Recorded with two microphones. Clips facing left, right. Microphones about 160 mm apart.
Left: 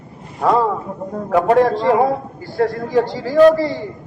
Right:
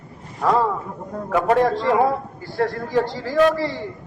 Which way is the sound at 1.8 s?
30° left (ahead or behind).